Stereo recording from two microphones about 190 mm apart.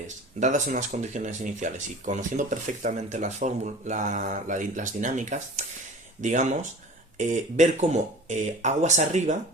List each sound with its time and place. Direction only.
0.3 s speech: 40° right (ahead or behind)